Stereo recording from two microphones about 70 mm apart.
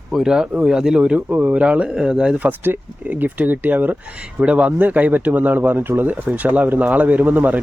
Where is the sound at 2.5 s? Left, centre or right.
Right.